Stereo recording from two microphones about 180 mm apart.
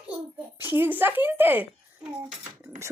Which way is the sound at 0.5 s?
10° right (ahead or behind).